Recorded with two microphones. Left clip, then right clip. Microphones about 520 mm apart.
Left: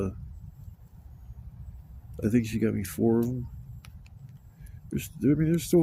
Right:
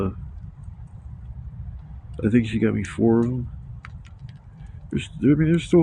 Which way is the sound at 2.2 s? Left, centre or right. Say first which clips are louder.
Right 6 dB; left.